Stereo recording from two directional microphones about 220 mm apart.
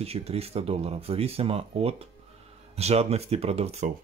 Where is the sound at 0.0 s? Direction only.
25° right (ahead or behind).